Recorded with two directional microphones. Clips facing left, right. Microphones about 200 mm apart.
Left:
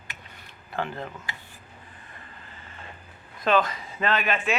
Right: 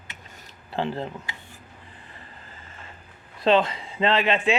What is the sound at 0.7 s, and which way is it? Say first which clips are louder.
Speech: right 4 dB; 30° right (ahead or behind).